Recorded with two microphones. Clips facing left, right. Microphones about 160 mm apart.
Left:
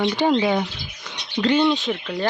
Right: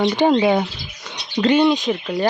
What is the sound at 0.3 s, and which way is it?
Speech, 35° right (ahead or behind).